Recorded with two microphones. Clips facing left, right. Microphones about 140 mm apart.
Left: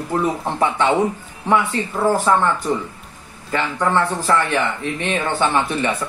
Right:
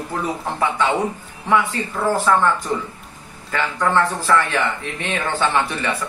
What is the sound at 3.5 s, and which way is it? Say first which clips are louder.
Speech: left 1 dB; 20° left (ahead or behind).